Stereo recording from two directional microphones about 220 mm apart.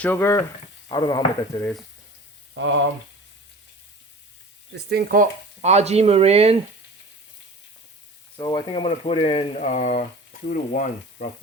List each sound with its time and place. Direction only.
0.0 s speech: 10° left (ahead or behind)
4.7 s speech: 45° right (ahead or behind); by 6.6 s 30° right (ahead or behind)
8.4 s speech: 15° left (ahead or behind); by 11.3 s 40° left (ahead or behind)